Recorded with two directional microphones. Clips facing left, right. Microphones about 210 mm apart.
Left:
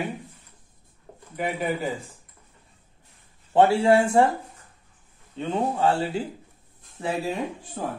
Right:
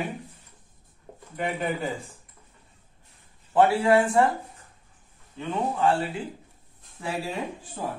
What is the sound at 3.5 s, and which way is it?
Speech, 25° left (ahead or behind).